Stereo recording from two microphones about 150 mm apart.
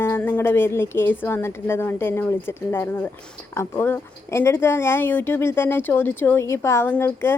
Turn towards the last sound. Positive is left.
turn(degrees=15)  # may be behind; listen again after turning